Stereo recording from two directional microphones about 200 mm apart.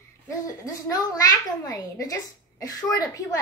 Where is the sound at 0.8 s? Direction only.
20° left (ahead or behind).